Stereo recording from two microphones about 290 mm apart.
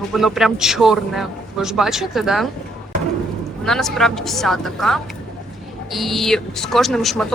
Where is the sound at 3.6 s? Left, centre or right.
Centre.